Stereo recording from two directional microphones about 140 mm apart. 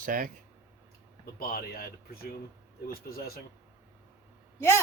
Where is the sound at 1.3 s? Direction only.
90° left.